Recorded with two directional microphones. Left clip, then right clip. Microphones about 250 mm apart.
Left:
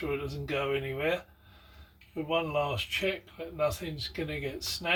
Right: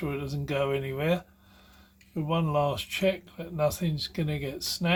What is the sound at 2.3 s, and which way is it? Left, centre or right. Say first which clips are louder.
Speech: right 2 dB; right.